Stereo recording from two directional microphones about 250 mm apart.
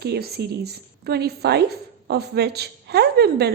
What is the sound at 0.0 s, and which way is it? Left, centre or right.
A woman's voice, right.